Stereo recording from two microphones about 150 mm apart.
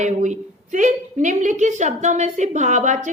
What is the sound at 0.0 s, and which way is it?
A woman's voice, 55° right (ahead or behind).